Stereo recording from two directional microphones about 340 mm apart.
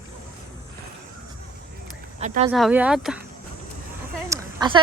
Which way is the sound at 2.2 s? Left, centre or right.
Centre.